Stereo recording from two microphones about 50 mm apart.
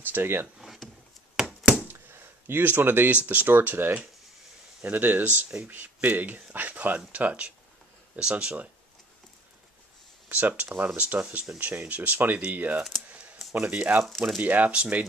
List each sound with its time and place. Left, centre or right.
0.0 s speech: right
1.4 s chopping: centre
1.9 s a sound: right
3.3 s speech: right
10.2 s speech: right
11.0 s speech: right